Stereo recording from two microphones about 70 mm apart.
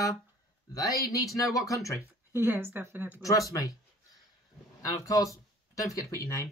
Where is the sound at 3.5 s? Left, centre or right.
Left.